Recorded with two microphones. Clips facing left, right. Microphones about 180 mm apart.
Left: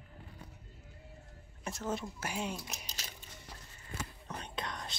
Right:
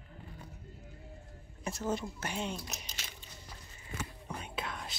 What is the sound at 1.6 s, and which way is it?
A woman's voice, centre (ahead or behind).